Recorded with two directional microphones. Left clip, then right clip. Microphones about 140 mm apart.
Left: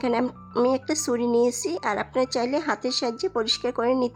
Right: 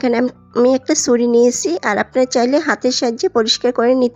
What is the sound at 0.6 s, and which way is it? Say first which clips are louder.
Speech: right 11 dB; 30° right (ahead or behind).